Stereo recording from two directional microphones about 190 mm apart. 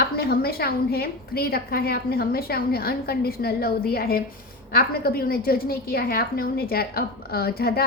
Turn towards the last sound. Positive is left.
turn(degrees=55)  # may be behind; listen again after turning